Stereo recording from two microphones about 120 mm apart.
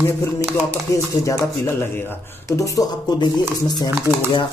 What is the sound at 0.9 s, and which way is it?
Speech, 25° left (ahead or behind).